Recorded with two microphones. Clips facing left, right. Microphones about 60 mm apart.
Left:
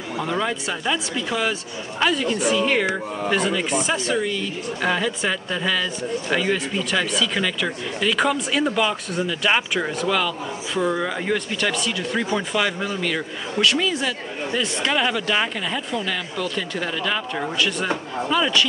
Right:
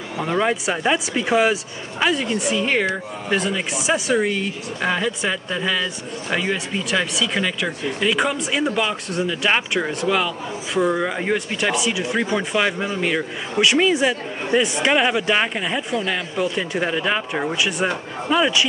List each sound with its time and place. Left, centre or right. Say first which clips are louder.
0.2 s speech: right 4 dB; right
1.5 s speech: right 3 dB; centre
4.2 s speech: right 3 dB; right
4.8 s speech: right 1 dB; centre